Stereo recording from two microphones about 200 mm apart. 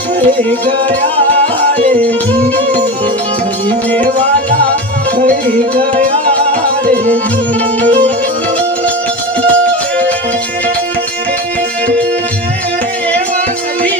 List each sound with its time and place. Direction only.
5.7 s music: 40° right (ahead or behind)
7.9 s music: 35° right (ahead or behind)